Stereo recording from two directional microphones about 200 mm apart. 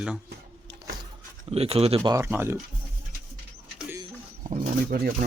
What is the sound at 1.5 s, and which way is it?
Speech, 30° right (ahead or behind).